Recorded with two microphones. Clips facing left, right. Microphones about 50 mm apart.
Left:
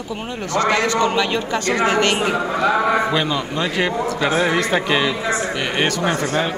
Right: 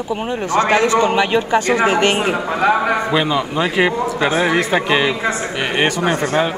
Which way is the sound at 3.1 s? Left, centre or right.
Centre.